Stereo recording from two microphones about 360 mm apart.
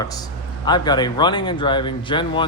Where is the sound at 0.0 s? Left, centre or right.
Centre.